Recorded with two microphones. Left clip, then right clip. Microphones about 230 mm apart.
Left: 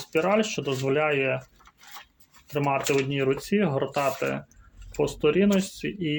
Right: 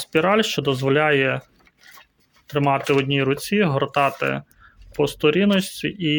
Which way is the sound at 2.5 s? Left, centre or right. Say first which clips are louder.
Right 5 dB; right.